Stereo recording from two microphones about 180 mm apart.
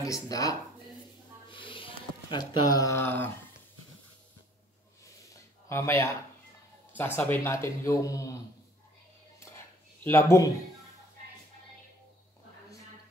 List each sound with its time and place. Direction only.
0.0 s speech: 20° left (ahead or behind)
1.5 s a sound: 30° left (ahead or behind); by 3.3 s 10° left (ahead or behind)
5.7 s speech: 15° left (ahead or behind)
7.2 s speech: 10° left (ahead or behind)
10.0 s speech: 15° left (ahead or behind)